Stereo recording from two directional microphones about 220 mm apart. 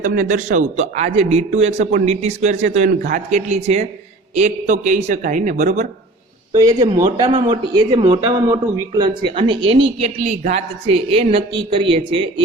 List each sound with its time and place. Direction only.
0.0 s a man's voice: 40° right (ahead or behind)
6.6 s speech: 20° right (ahead or behind)